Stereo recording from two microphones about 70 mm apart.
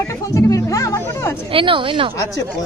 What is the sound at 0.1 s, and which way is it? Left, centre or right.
Speech, left.